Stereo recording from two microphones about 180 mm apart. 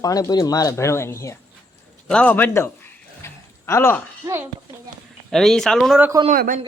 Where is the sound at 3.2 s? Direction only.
15° left (ahead or behind).